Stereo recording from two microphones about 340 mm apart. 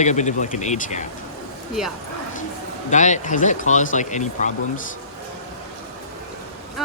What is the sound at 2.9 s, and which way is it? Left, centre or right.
Speech, left.